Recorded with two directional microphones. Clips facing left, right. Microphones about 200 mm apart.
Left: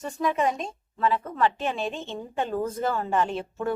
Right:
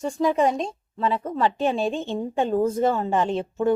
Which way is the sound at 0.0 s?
30° right (ahead or behind).